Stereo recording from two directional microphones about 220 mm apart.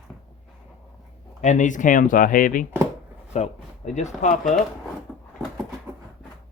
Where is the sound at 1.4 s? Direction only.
35° left (ahead or behind).